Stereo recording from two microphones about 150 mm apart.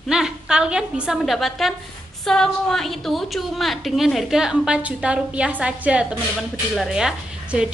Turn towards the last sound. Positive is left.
turn(degrees=-5)  # may be behind; listen again after turning